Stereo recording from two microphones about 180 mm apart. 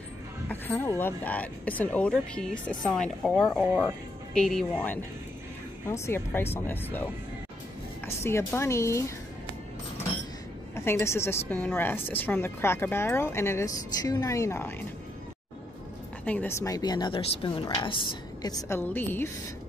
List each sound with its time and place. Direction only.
0.5 s a woman's voice: 10° left (ahead or behind)
8.2 s a woman's voice: 15° left (ahead or behind)
10.8 s a woman's voice: 15° left (ahead or behind)
16.3 s speech: 10° left (ahead or behind)